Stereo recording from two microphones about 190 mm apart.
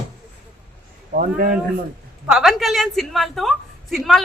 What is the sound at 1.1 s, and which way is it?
Speech, 45° right (ahead or behind).